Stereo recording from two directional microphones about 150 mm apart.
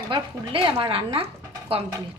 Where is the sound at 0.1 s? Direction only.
35° right (ahead or behind).